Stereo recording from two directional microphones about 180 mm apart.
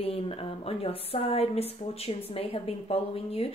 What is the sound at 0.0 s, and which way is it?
A woman's voice, 30° left (ahead or behind).